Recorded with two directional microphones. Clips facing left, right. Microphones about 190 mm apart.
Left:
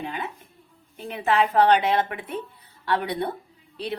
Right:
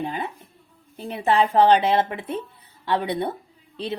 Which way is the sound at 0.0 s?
35° right (ahead or behind).